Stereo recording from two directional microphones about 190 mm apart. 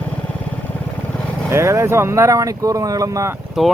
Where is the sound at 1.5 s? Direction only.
15° right (ahead or behind).